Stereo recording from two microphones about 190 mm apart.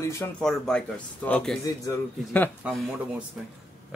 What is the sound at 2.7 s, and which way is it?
Speech, 5° right (ahead or behind).